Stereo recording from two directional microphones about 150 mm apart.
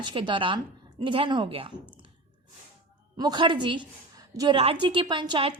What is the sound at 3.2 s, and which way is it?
A woman's voice, 30° right (ahead or behind).